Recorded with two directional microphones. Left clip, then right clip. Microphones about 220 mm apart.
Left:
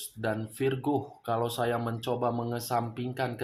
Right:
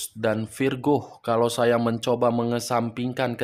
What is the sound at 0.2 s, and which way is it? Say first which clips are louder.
Speech: right 6 dB; 45° right (ahead or behind).